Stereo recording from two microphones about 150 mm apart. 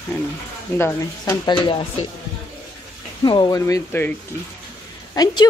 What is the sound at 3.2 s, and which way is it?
Speech, 30° left (ahead or behind).